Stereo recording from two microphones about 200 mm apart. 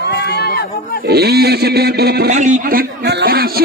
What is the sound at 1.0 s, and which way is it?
Speech, 55° right (ahead or behind).